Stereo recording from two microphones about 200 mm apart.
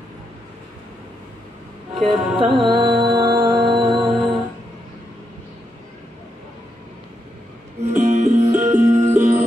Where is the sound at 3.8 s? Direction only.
Centre (ahead or behind).